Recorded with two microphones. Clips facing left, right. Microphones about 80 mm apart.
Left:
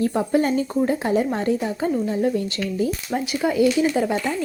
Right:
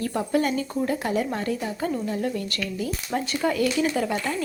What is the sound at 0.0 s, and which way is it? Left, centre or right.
Speech, left.